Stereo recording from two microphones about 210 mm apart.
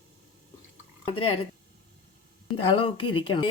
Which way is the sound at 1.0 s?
25° left (ahead or behind).